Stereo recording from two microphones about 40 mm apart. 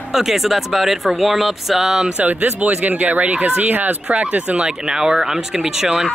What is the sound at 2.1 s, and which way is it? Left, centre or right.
Speech, right.